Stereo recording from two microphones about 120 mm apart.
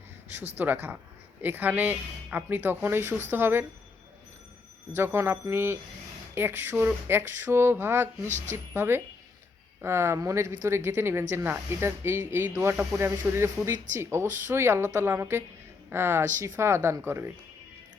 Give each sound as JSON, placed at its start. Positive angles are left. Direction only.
{"t": 0.5, "sound": "speech", "side_deg": -15}
{"t": 4.9, "sound": "speech", "side_deg": -20}